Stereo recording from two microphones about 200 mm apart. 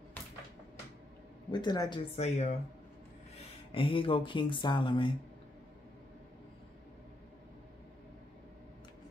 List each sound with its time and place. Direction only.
1.5 s speech: 20° left (ahead or behind)
3.7 s speech: 25° left (ahead or behind)